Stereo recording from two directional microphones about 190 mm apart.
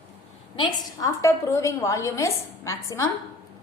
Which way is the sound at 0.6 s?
15° left (ahead or behind).